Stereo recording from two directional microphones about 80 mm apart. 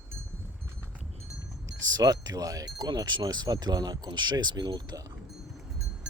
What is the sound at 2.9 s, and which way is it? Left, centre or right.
Speech, right.